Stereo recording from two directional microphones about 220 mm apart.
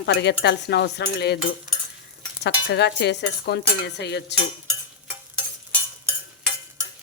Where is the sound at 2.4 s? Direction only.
50° left (ahead or behind).